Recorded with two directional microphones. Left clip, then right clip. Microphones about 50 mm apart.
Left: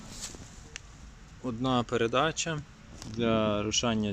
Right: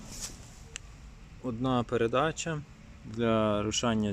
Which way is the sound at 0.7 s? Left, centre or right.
Centre.